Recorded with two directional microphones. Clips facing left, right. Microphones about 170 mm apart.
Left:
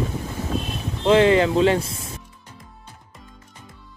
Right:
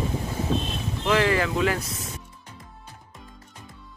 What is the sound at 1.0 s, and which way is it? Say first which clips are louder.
Speech: left 7 dB; 25° left (ahead or behind).